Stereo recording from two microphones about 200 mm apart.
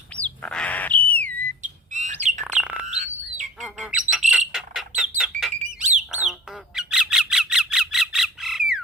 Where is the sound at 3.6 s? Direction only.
5° right (ahead or behind).